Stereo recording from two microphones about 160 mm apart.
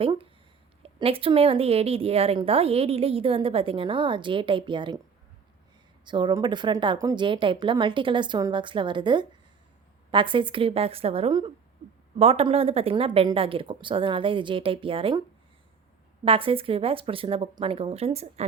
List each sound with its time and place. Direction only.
0.0 s a woman's voice: 35° right (ahead or behind)
6.1 s a woman's voice: 30° right (ahead or behind)
16.2 s a woman's voice: 35° right (ahead or behind)